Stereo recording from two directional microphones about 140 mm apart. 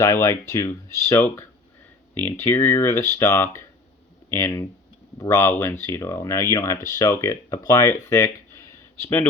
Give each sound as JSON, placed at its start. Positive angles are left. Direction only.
{"t": 0.0, "sound": "speech", "side_deg": 20}
{"t": 9.0, "sound": "speech", "side_deg": 15}